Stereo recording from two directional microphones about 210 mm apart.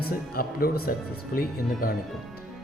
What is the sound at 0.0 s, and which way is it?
Speech, 45° left (ahead or behind).